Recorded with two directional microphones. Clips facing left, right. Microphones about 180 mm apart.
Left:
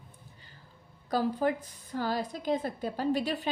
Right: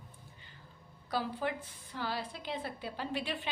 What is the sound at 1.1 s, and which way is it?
A woman's voice, 40° left (ahead or behind).